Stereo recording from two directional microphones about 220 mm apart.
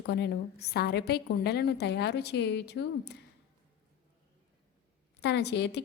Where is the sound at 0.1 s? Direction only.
50° left (ahead or behind).